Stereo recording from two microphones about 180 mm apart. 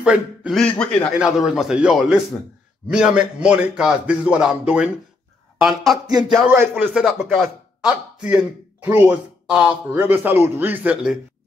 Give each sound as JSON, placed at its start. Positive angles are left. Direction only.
{"t": 0.0, "sound": "a man's voice", "side_deg": -5}
{"t": 6.0, "sound": "a sound", "side_deg": -20}
{"t": 6.3, "sound": "a man's voice", "side_deg": 0}